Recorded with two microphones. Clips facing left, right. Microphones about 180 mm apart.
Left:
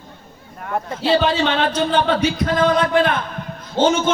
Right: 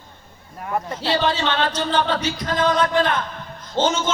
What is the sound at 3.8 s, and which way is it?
Speech, 10° left (ahead or behind).